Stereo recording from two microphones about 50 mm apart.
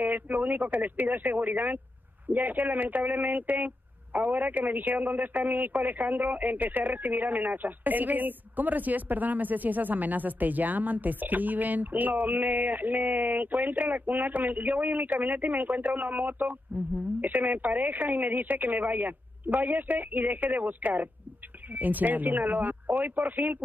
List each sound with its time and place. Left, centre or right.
0.0 s speech: right